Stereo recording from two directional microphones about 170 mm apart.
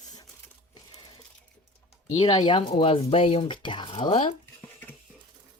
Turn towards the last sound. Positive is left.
turn(degrees=30)  # may be behind; listen again after turning